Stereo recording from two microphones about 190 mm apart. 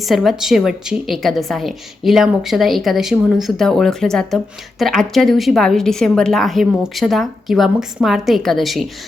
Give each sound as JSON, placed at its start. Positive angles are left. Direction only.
{"t": 0.0, "sound": "a woman's voice", "side_deg": 0}